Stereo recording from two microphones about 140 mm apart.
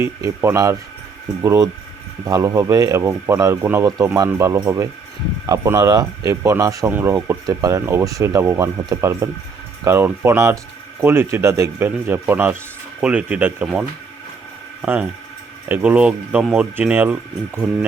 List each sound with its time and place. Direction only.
0.0 s speech: 20° right (ahead or behind)